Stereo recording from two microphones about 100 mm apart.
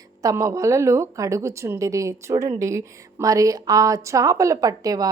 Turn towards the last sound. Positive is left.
turn(degrees=-35)  # may be behind; listen again after turning